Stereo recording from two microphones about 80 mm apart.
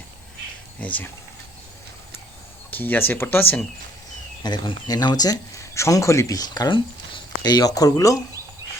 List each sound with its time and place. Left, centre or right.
0.8 s speech: centre
2.6 s speech: left
4.4 s speech: left
4.9 s speech: left
5.7 s speech: left